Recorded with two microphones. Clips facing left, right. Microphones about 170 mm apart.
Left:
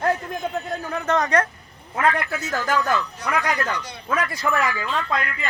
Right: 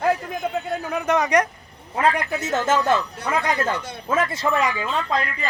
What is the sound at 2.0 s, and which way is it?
Speech, 25° right (ahead or behind).